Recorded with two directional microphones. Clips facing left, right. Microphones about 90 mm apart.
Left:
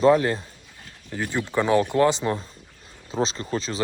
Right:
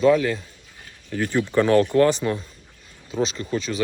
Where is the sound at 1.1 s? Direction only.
15° left (ahead or behind).